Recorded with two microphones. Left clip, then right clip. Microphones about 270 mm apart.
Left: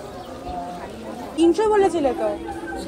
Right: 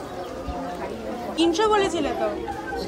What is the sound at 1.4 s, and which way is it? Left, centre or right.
Speech, centre.